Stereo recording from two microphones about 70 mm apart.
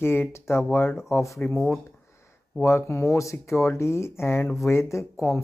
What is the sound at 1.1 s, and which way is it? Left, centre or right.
Speech, left.